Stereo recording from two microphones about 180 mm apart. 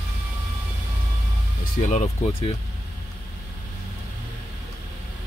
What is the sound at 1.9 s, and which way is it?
Speech, 40° left (ahead or behind).